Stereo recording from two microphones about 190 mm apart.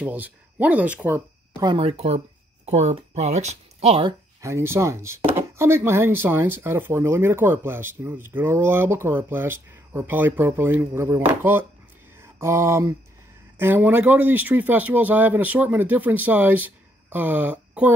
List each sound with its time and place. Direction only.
0.0 s speech: 10° right (ahead or behind)
1.6 s speech: 25° right (ahead or behind)
4.4 s speech: 15° right (ahead or behind)
12.2 s mantra: 15° right (ahead or behind)
13.6 s speech: 10° right (ahead or behind)